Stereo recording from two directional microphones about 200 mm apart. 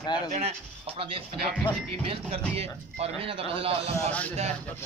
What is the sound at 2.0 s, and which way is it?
A man's voice, 30° right (ahead or behind).